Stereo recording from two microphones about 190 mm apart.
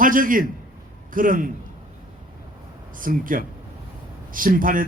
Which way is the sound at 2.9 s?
45° right (ahead or behind).